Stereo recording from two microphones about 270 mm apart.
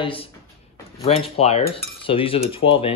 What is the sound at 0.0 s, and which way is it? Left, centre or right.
Speech, centre.